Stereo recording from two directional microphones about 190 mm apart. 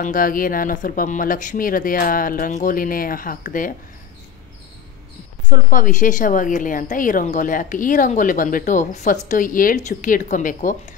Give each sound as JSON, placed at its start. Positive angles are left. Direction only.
{"t": 0.0, "sound": "a woman's voice", "side_deg": 45}
{"t": 5.5, "sound": "a woman's voice", "side_deg": 45}